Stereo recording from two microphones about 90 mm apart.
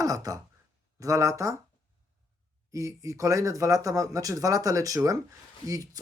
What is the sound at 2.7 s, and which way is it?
Speech, 35° right (ahead or behind).